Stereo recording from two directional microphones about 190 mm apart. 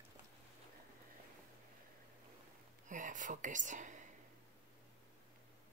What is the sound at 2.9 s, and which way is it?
Speech, 45° right (ahead or behind).